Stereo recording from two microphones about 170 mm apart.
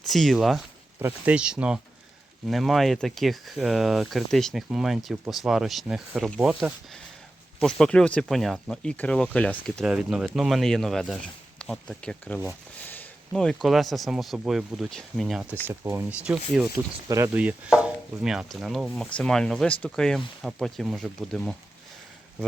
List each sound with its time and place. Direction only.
0.1 s speech: centre (ahead or behind)
0.9 s speech: 10° right (ahead or behind)
15.6 s speech: 15° right (ahead or behind)
16.7 s speech: 20° right (ahead or behind)
17.3 s speech: 5° right (ahead or behind)